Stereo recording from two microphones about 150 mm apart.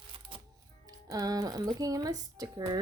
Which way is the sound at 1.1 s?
25° right (ahead or behind).